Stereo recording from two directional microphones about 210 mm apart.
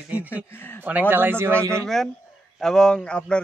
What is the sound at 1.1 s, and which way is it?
Speech, 10° right (ahead or behind).